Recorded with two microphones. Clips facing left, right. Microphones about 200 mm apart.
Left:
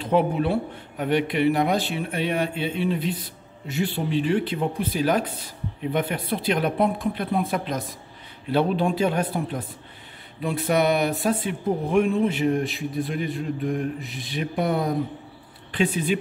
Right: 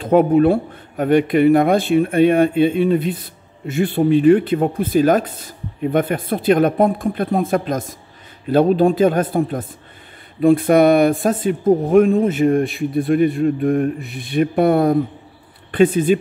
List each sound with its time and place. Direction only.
0.0 s speech: 45° right (ahead or behind)